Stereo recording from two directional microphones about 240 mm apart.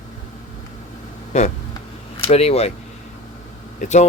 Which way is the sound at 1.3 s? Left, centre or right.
Left.